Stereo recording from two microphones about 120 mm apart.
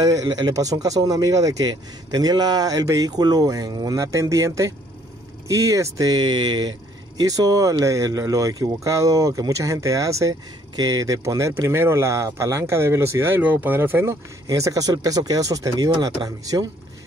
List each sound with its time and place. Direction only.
0.0 s speech: 30° right (ahead or behind)